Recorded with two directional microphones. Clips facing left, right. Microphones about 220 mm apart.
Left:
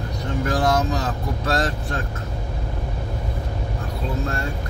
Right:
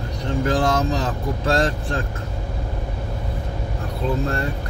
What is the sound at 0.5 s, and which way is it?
Speech, 30° right (ahead or behind).